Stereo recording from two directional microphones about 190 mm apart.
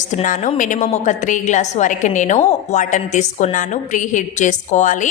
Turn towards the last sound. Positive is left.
turn(degrees=40)  # may be behind; listen again after turning